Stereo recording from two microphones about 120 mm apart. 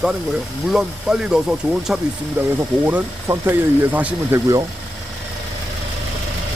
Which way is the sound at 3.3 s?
15° right (ahead or behind).